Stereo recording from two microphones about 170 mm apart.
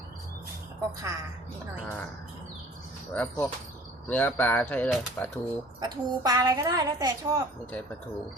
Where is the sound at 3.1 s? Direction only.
10° left (ahead or behind).